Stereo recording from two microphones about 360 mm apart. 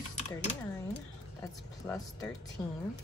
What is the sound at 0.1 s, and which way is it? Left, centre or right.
Typing, centre.